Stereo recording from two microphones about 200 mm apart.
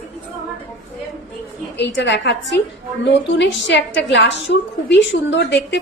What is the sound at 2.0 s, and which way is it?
Speech, 60° left (ahead or behind).